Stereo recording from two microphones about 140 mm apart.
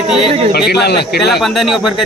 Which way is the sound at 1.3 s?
Centre (ahead or behind).